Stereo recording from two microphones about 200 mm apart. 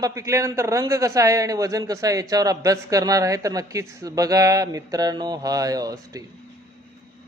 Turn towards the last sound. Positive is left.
turn(degrees=-20)  # may be behind; listen again after turning